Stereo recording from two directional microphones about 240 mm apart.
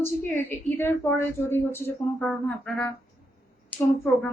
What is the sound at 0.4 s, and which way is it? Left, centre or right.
A woman's voice, centre.